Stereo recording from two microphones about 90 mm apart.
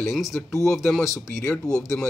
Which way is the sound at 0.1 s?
Centre (ahead or behind).